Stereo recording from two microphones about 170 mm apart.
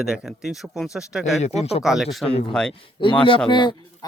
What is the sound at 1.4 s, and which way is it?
Speech, 40° left (ahead or behind).